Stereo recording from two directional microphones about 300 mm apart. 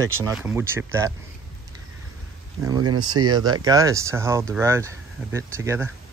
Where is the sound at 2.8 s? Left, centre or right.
Right.